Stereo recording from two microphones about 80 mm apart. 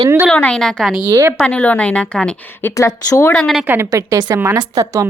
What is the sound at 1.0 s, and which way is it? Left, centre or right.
Speech, right.